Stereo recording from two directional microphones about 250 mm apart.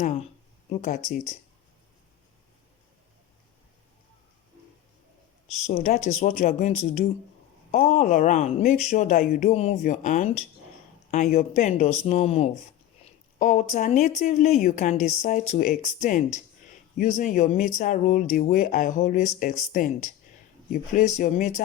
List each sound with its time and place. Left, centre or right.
0.7 s speech: left
5.6 s speech: left